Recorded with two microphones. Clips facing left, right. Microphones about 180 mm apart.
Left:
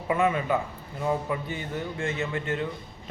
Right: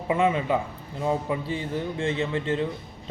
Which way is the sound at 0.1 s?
25° right (ahead or behind).